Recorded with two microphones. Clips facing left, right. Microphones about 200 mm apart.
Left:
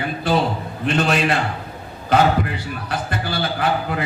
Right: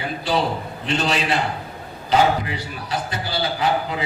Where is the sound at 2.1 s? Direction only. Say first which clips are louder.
Left 1 dB; 55° left (ahead or behind).